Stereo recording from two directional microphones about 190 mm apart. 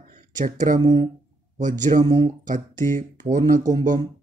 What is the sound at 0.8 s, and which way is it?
Speech, 20° right (ahead or behind).